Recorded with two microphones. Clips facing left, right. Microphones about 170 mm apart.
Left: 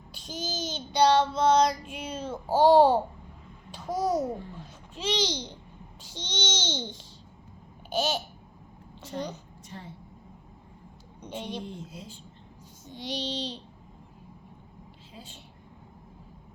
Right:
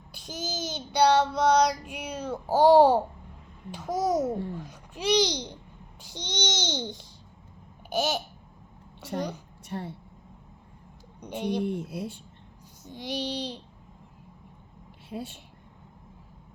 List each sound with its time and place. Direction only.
0.3 s a child's voice: 15° right (ahead or behind)
1.2 s female singing: 15° right (ahead or behind)
3.7 s speech: 15° right (ahead or behind)
6.0 s babbling: 15° right (ahead or behind)
9.6 s a woman's voice: 65° right (ahead or behind)
11.2 s a woman's voice: 15° right (ahead or behind)
11.6 s speech: 65° right (ahead or behind)
12.8 s a child's voice: 15° right (ahead or behind)
15.1 s a woman's voice: 50° right (ahead or behind)